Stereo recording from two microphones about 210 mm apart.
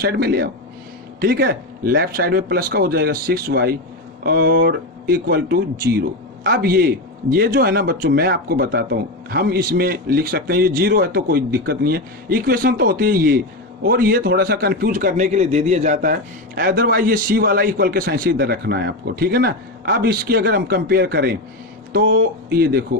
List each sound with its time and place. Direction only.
0.0 s a man's voice: 50° right (ahead or behind)